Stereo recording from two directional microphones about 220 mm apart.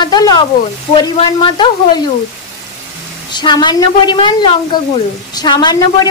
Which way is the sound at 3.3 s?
20° left (ahead or behind).